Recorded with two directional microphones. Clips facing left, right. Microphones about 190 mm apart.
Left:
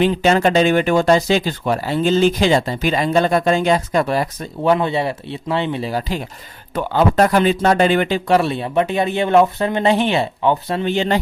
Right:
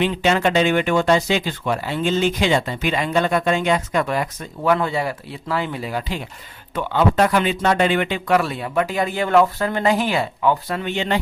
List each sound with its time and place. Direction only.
0.0 s speech: 40° left (ahead or behind)